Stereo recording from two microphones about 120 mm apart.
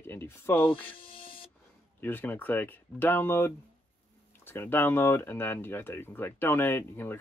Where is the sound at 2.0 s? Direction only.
15° left (ahead or behind).